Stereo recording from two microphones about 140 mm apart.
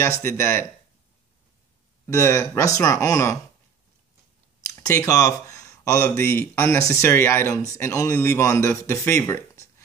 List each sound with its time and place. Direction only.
0.0 s speech: 20° left (ahead or behind)
2.0 s speech: 20° left (ahead or behind)
4.6 s a sound: 20° left (ahead or behind)
6.0 s speech: 15° left (ahead or behind)